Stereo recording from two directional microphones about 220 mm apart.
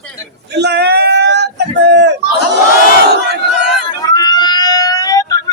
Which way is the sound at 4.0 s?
15° left (ahead or behind).